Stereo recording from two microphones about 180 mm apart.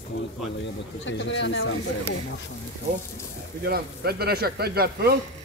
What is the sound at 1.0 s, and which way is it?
Speech, 85° left.